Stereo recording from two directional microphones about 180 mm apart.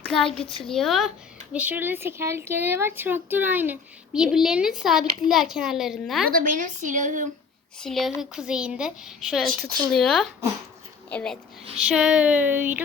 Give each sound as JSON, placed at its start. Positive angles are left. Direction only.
{"t": 0.0, "sound": "a child's voice", "side_deg": 5}
{"t": 6.3, "sound": "a woman's voice", "side_deg": -50}
{"t": 7.8, "sound": "speech", "side_deg": 0}
{"t": 11.8, "sound": "speech", "side_deg": -5}